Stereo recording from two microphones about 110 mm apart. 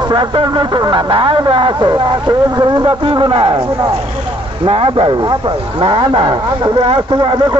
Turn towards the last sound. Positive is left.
turn(degrees=-40)  # may be behind; listen again after turning